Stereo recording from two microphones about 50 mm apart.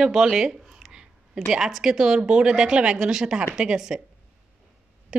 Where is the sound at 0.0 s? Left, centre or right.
Centre.